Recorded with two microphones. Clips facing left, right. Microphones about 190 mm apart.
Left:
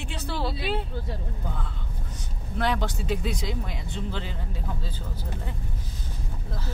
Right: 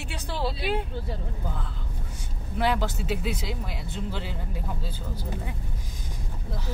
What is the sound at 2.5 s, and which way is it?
Speech, 5° right (ahead or behind).